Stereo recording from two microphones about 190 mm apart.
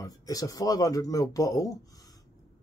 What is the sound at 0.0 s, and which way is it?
Speech, 20° left (ahead or behind).